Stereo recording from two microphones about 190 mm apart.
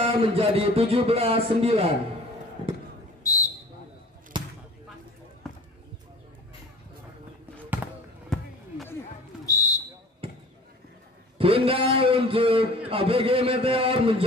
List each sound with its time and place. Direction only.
0.0 s speech: 30° right (ahead or behind)
3.3 s a sound: 20° left (ahead or behind)
4.3 s basketball bounce: 25° right (ahead or behind)
8.3 s basketball bounce: centre (ahead or behind)
9.5 s a sound: 20° left (ahead or behind)
10.2 s basketball bounce: 30° right (ahead or behind)
11.3 s a man's voice: 30° right (ahead or behind)